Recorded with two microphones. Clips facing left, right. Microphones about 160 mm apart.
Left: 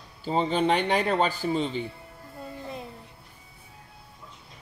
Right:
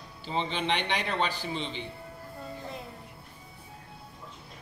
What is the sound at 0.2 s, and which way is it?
A man's voice, 40° left (ahead or behind).